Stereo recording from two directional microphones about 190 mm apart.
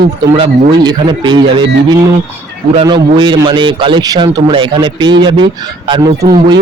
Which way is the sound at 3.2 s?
25° right (ahead or behind).